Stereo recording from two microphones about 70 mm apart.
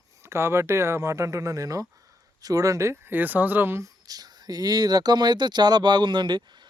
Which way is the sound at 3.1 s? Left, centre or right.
Right.